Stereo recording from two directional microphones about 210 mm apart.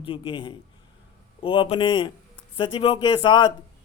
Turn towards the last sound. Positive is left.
turn(degrees=20)  # may be behind; listen again after turning